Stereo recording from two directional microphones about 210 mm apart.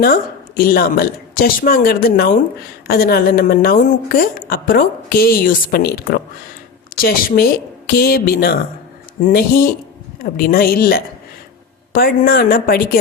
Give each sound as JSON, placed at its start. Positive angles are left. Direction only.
{"t": 0.0, "sound": "a woman's voice", "side_deg": 45}